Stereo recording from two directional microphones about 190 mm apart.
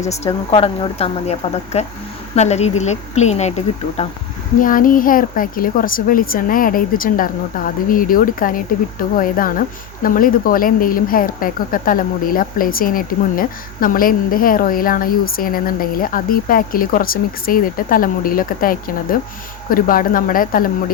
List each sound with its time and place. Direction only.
0.3 s a woman's voice: 30° left (ahead or behind)
4.6 s a woman's voice: 45° left (ahead or behind)